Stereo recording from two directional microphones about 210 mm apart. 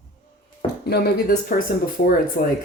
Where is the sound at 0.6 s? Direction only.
50° left (ahead or behind).